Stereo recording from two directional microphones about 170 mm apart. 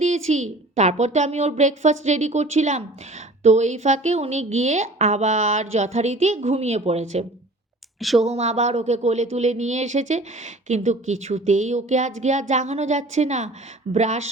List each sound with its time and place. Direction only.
0.0 s a woman's voice: 40° right (ahead or behind)
7.9 s speech: centre (ahead or behind)
8.2 s a woman's voice: 40° right (ahead or behind)